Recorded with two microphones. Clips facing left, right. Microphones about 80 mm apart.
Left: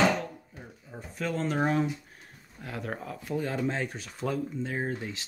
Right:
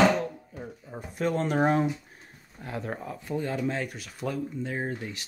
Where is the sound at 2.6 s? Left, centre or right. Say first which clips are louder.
Right 2 dB; centre.